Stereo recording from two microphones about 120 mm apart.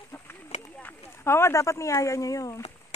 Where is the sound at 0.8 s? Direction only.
20° left (ahead or behind).